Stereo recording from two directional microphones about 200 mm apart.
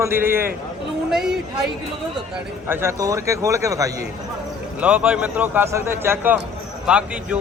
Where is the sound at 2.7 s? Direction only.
10° right (ahead or behind).